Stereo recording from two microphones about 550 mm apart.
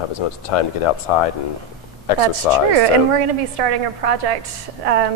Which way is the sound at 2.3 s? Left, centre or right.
Right.